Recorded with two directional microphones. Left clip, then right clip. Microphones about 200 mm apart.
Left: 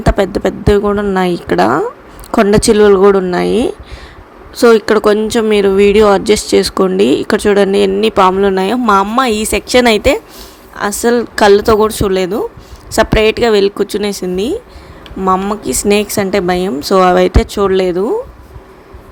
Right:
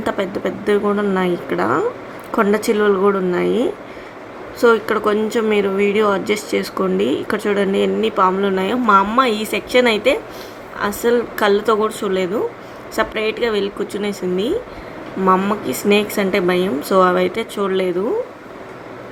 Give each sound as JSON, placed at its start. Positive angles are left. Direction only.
{"t": 0.1, "sound": "a woman's voice", "side_deg": 40}
{"t": 15.2, "sound": "speech", "side_deg": 35}